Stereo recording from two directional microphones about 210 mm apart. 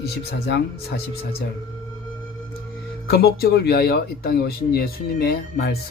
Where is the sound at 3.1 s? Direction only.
50° left (ahead or behind).